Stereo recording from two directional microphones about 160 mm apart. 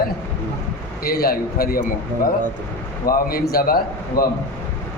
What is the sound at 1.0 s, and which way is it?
Speech, 75° left (ahead or behind).